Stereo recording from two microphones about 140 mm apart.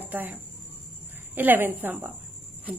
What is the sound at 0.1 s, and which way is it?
A woman's voice, 10° right (ahead or behind).